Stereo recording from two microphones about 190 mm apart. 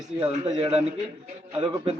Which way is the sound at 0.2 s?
30° right (ahead or behind).